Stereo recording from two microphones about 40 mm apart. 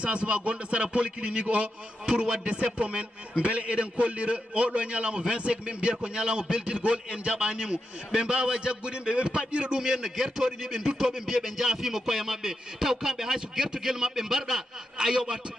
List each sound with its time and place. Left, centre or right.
0.0 s speech: right; by 11.1 s centre
11.1 s rapping: centre